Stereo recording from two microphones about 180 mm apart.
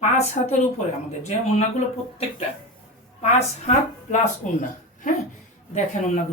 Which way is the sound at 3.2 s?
40° left (ahead or behind).